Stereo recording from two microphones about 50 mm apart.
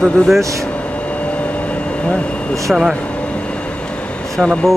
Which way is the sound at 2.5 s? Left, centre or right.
Centre.